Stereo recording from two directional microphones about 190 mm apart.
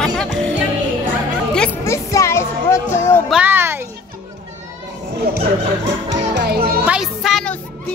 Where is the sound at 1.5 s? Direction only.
10° left (ahead or behind).